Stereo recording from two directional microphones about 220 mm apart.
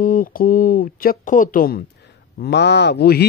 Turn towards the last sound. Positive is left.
turn(degrees=45)  # may be behind; listen again after turning